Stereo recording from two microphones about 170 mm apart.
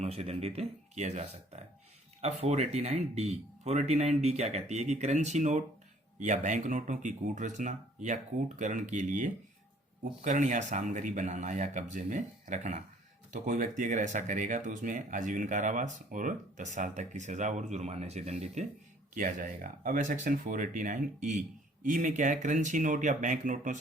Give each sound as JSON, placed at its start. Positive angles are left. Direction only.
{"t": 0.0, "sound": "speech", "side_deg": -35}
{"t": 2.2, "sound": "speech", "side_deg": -40}
{"t": 19.1, "sound": "speech", "side_deg": -55}